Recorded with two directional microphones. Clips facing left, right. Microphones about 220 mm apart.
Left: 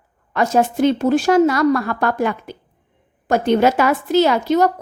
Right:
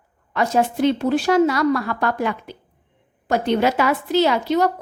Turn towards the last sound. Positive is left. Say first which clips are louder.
# left 3 dB
turn(degrees=45)  # may be behind; listen again after turning